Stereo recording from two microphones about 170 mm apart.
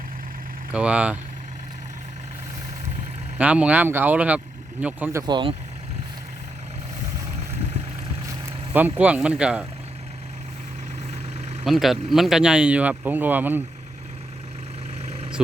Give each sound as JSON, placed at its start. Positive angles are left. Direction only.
{"t": 0.7, "sound": "speech", "side_deg": -5}
{"t": 3.3, "sound": "speech", "side_deg": -5}
{"t": 5.2, "sound": "speech", "side_deg": -30}
{"t": 8.7, "sound": "speech", "side_deg": -10}
{"t": 11.6, "sound": "speech", "side_deg": 0}
{"t": 15.0, "sound": "vehicle", "side_deg": -40}